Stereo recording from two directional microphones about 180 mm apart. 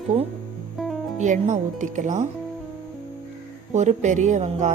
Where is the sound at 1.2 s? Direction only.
40° right (ahead or behind).